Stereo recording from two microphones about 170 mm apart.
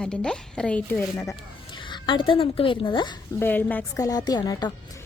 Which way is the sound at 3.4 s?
10° left (ahead or behind).